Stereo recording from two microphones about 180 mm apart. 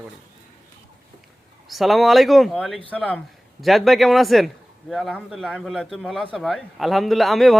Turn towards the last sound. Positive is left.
turn(degrees=0)  # may be behind; listen again after turning